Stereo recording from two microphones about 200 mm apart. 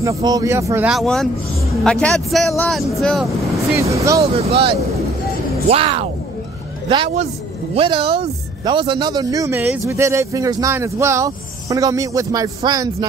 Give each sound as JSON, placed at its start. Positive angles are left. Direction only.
{"t": 0.0, "sound": "speech", "side_deg": -15}
{"t": 0.9, "sound": "speech", "side_deg": 0}
{"t": 3.7, "sound": "speech", "side_deg": -15}
{"t": 4.2, "sound": "speech", "side_deg": -30}